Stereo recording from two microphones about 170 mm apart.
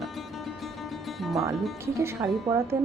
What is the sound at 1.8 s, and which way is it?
Speech, 15° right (ahead or behind).